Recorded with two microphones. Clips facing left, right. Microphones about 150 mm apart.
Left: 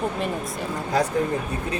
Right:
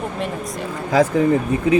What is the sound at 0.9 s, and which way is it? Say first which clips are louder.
Speech: right 7 dB; 90° right.